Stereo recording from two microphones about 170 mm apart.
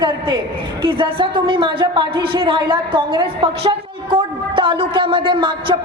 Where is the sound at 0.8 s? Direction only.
30° right (ahead or behind).